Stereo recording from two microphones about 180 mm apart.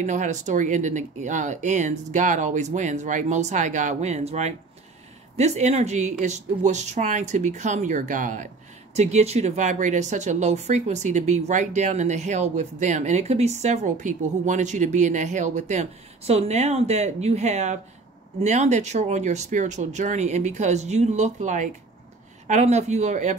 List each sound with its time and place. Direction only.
0.0 s speech: 45° right (ahead or behind)